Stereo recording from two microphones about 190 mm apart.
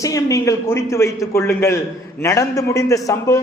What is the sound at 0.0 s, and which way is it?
A man's voice, 15° left (ahead or behind).